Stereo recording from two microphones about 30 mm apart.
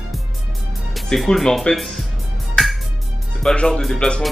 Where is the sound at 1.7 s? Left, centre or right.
Left.